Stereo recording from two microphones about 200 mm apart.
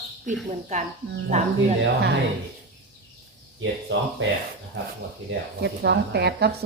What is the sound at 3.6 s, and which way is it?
Speech, 70° right (ahead or behind).